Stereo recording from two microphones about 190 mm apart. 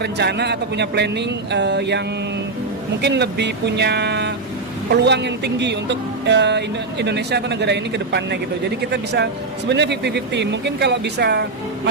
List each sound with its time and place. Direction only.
0.0 s speech: 60° right (ahead or behind)
3.0 s speech: 60° right (ahead or behind)